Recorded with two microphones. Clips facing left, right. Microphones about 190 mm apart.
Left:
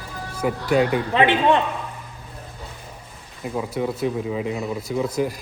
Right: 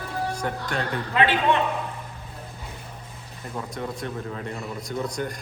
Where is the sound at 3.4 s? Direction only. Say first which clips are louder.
Left 7 dB; 5° left (ahead or behind).